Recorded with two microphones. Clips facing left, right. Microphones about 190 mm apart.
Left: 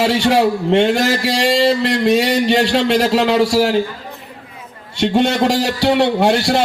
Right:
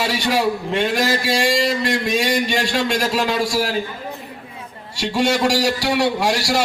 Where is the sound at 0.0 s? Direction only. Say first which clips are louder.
Left 6 dB; 65° left (ahead or behind).